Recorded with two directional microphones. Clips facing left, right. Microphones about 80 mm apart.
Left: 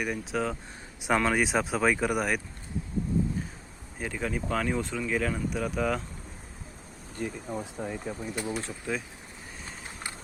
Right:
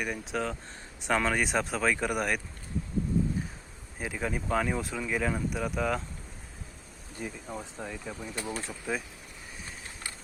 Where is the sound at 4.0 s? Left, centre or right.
Centre.